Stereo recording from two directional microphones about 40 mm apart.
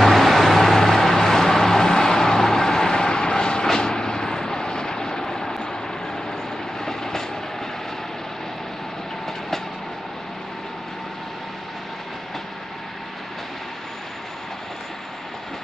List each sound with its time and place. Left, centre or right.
0.0 s vehicle: centre
6.8 s vehicle: centre